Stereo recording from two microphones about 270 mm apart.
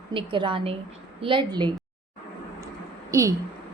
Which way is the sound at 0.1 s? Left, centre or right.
Centre.